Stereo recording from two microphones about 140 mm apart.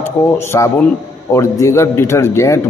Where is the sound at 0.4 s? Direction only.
20° left (ahead or behind).